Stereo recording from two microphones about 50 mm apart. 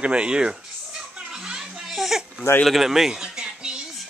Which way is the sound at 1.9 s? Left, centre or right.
Centre.